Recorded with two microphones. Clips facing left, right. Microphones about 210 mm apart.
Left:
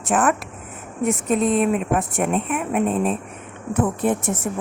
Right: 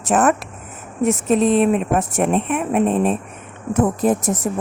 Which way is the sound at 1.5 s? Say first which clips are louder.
Right 3 dB; 30° right (ahead or behind).